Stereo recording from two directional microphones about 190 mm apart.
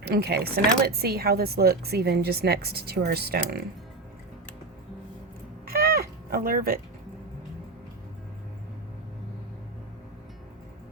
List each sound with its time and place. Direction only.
0.0 s a woman's voice: 55° right (ahead or behind)
5.6 s cat: 55° right (ahead or behind)